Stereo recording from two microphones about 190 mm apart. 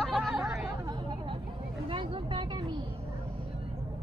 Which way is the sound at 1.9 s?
25° right (ahead or behind).